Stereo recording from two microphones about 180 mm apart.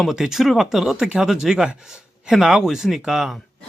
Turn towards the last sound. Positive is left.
turn(degrees=0)  # may be behind; listen again after turning